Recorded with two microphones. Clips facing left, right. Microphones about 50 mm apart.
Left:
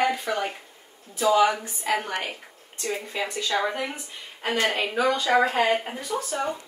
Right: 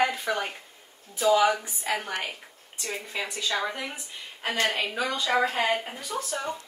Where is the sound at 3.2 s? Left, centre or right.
Centre; by 6.6 s left.